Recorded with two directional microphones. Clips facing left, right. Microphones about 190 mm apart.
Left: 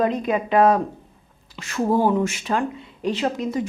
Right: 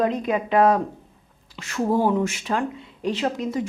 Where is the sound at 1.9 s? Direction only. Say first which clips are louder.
Left 1 dB; 25° left (ahead or behind).